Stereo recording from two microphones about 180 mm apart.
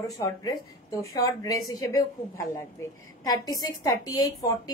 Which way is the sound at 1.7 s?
20° left (ahead or behind).